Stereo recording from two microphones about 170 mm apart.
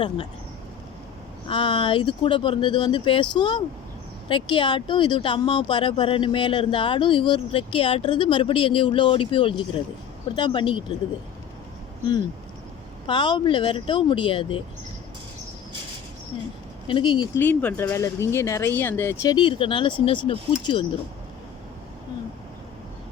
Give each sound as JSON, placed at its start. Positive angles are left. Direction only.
{"t": 1.5, "sound": "speech", "side_deg": 30}
{"t": 13.1, "sound": "speech", "side_deg": 25}
{"t": 16.8, "sound": "speech", "side_deg": 30}
{"t": 17.3, "sound": "speech", "side_deg": 10}